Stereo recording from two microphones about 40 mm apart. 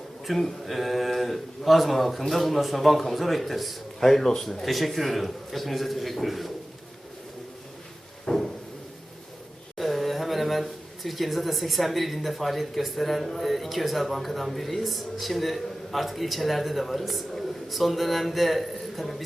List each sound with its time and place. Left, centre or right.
0.3 s a man's voice: centre
8.3 s a sound: left
9.7 s speech: centre